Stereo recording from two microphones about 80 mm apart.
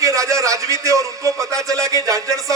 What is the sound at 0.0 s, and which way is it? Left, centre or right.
A man's voice, right.